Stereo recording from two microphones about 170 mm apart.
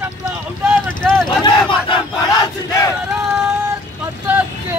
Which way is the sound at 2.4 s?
20° left (ahead or behind).